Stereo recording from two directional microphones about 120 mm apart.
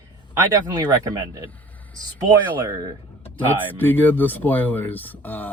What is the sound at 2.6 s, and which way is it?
Speech, 30° right (ahead or behind).